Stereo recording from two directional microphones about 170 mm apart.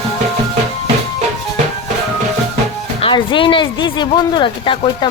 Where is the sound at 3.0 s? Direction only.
30° left (ahead or behind).